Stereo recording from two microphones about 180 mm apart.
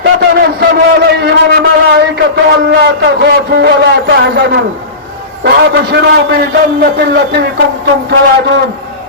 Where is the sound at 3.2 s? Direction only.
65° right (ahead or behind).